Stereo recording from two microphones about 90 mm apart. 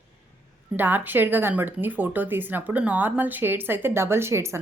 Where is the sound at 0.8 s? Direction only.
20° right (ahead or behind).